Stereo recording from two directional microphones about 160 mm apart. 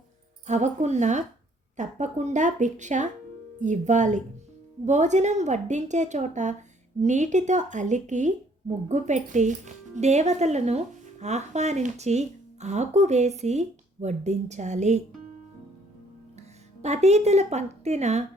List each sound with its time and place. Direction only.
0.4 s speech: 45° right (ahead or behind)
16.8 s speech: 45° right (ahead or behind)